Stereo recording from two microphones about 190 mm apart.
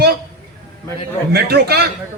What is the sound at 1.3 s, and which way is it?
Speech, 55° right (ahead or behind).